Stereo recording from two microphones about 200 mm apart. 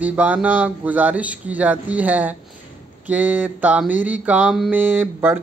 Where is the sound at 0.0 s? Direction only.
10° right (ahead or behind).